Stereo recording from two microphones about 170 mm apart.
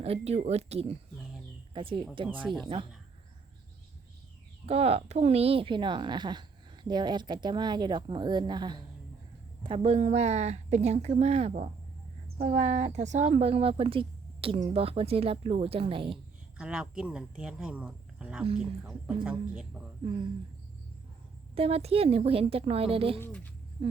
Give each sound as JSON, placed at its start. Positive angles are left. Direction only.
{"t": 0.0, "sound": "speech", "side_deg": -35}
{"t": 4.6, "sound": "speech", "side_deg": -35}
{"t": 16.6, "sound": "speech", "side_deg": -5}
{"t": 21.5, "sound": "speech", "side_deg": -35}
{"t": 23.2, "sound": "speech", "side_deg": 10}